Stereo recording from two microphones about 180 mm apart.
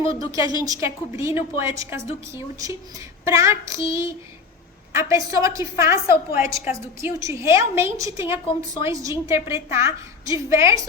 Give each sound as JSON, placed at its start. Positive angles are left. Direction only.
{"t": 0.2, "sound": "a woman's voice", "side_deg": -20}